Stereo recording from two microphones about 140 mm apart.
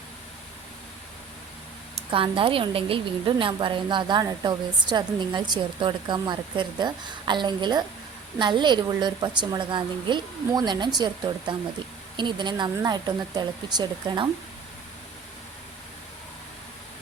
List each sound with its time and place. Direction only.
2.0 s a woman's voice: 40° right (ahead or behind)